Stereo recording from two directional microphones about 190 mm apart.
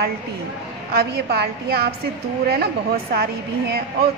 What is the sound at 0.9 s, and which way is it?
A woman's voice, 55° right (ahead or behind).